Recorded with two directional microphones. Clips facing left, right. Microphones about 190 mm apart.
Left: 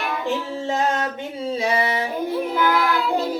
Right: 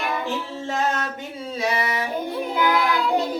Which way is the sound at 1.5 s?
30° left (ahead or behind).